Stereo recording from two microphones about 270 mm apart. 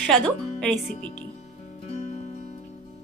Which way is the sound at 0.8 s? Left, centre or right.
Left.